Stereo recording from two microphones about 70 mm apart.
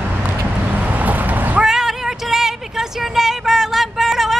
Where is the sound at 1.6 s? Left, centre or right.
Centre.